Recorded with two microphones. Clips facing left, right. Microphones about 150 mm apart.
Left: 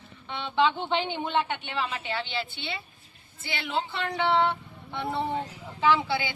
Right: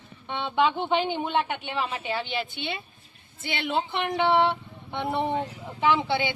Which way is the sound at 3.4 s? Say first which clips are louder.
Right 3 dB; 20° right (ahead or behind).